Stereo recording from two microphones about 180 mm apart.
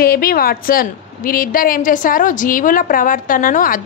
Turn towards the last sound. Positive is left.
turn(degrees=50)  # may be behind; listen again after turning